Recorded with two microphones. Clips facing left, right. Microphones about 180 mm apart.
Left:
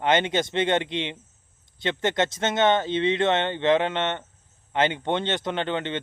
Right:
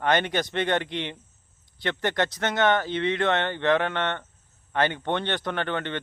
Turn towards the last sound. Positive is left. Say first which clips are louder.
# left 2 dB
turn(degrees=20)  # may be behind; listen again after turning